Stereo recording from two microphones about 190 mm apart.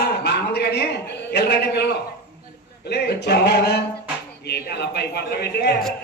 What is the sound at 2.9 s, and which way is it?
A man's voice, 60° left (ahead or behind).